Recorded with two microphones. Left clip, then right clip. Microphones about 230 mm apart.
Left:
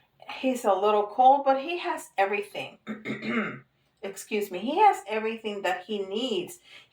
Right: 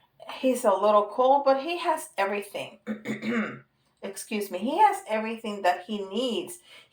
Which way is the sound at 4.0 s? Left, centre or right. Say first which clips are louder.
Left 2 dB; right.